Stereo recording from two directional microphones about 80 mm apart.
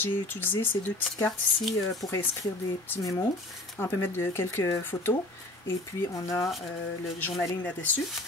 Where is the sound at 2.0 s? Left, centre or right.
Left.